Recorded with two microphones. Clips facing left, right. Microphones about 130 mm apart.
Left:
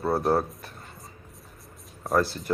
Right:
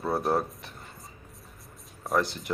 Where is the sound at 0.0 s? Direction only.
Centre (ahead or behind).